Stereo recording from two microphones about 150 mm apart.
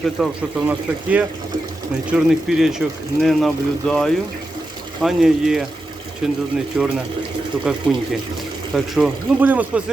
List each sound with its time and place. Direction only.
0.2 s speech: 5° right (ahead or behind)